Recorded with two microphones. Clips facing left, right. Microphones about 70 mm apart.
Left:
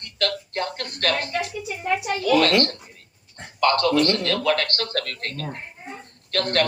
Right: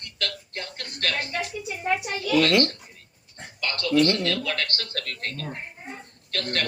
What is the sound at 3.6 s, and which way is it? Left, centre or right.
A man's voice, left.